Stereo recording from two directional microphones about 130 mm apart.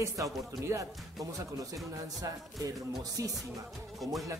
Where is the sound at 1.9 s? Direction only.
25° right (ahead or behind).